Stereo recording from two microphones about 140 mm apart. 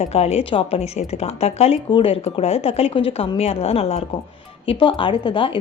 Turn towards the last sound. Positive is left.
turn(degrees=35)  # may be behind; listen again after turning